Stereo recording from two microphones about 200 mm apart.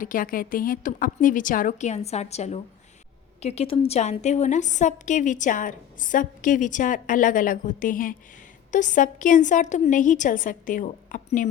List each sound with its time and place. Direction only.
0.0 s a woman's voice: 45° left (ahead or behind)